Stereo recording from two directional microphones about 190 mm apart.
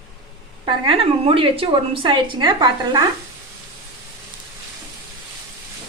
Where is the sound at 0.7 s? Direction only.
30° right (ahead or behind).